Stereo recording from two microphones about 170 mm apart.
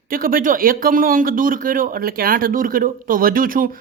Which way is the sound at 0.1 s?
55° right (ahead or behind).